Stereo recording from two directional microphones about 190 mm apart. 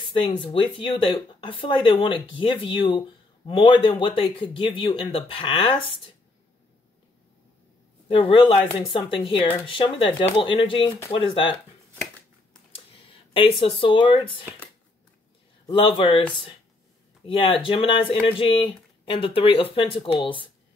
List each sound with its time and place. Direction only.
0.1 s speech: 25° left (ahead or behind)
8.1 s speech: 25° left (ahead or behind)
12.7 s speech: 30° left (ahead or behind)
15.6 s speech: 25° left (ahead or behind)
17.3 s speech: 25° left (ahead or behind)